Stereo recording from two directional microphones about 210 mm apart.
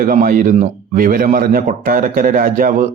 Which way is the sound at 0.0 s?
40° right (ahead or behind).